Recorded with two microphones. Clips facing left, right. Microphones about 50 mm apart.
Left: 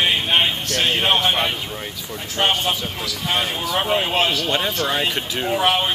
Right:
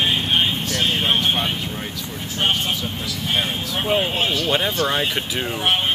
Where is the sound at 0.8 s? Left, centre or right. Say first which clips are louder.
Left 3 dB; left.